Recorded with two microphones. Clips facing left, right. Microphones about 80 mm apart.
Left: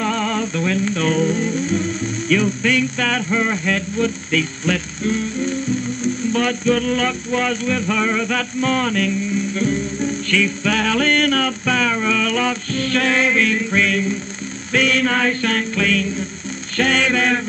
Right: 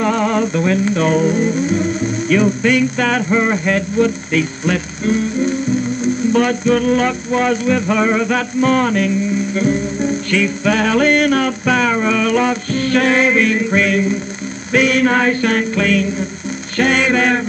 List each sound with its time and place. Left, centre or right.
0.0 s a sound: right
0.8 s music: centre
4.4 s music: centre
6.7 s music: right
9.5 s music: centre
10.4 s music: centre
15.0 s music: right
16.7 s music: centre
17.1 s music: right